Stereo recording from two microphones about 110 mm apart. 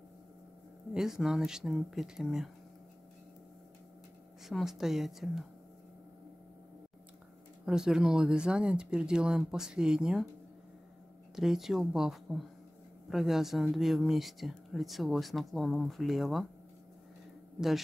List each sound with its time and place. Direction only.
0.9 s speech: 5° right (ahead or behind)
4.5 s speech: 5° right (ahead or behind)
7.6 s speech: 5° right (ahead or behind)
11.3 s speech: 5° right (ahead or behind)
17.6 s a man's voice: centre (ahead or behind)